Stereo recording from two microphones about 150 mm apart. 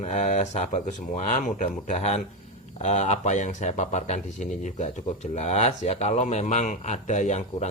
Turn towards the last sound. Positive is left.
turn(degrees=50)  # may be behind; listen again after turning